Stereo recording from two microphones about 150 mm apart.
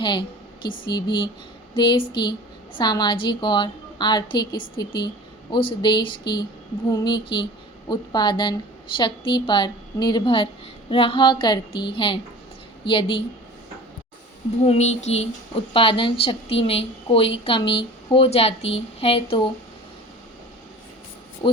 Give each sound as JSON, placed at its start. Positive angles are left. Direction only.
{"t": 0.0, "sound": "a woman's voice", "side_deg": 30}
{"t": 14.6, "sound": "a woman's voice", "side_deg": 45}
{"t": 21.4, "sound": "a woman's voice", "side_deg": 35}